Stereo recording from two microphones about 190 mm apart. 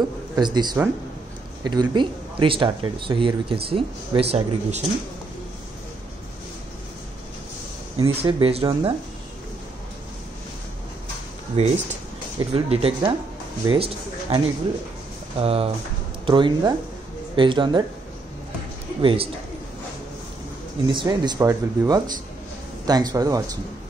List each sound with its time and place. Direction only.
0.4 s speech: 20° right (ahead or behind)
8.0 s speech: 30° right (ahead or behind)
11.5 s speech: 35° right (ahead or behind)
18.9 s speech: 25° right (ahead or behind)
20.9 s speech: 25° right (ahead or behind)